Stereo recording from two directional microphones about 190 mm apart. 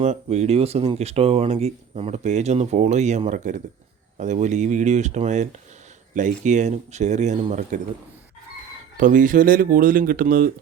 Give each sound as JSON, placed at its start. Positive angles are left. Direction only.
{"t": 0.0, "sound": "speech", "side_deg": -35}
{"t": 9.0, "sound": "speech", "side_deg": -45}